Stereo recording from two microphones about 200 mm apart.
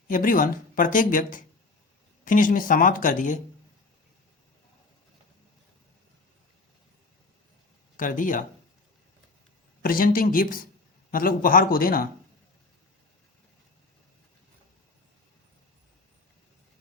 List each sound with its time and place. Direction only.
0.1 s speech: 45° left (ahead or behind)
7.9 s speech: 40° left (ahead or behind)
9.8 s speech: 45° left (ahead or behind)